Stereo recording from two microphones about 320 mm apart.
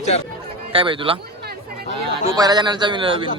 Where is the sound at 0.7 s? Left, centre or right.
Centre.